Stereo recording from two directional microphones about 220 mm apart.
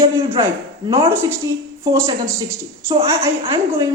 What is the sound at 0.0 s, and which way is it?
A man's voice, 10° right (ahead or behind).